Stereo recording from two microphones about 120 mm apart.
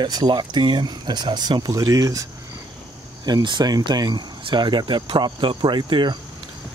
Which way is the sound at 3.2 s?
35° right (ahead or behind).